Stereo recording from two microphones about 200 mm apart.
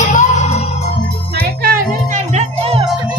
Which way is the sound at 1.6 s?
40° right (ahead or behind).